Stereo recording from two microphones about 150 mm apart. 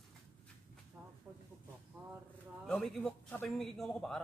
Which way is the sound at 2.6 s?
5° left (ahead or behind).